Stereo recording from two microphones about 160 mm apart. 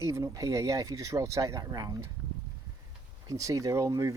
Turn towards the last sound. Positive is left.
turn(degrees=-20)  # may be behind; listen again after turning